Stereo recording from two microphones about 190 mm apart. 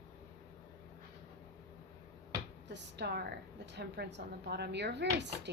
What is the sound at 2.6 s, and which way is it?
Speech, 65° right (ahead or behind).